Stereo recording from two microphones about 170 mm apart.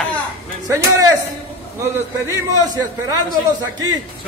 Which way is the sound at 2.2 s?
20° right (ahead or behind).